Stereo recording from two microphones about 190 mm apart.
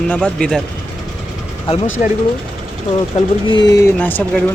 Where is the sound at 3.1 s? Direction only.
35° left (ahead or behind).